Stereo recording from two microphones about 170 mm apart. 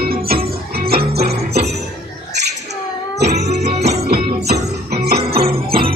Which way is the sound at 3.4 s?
75° right (ahead or behind).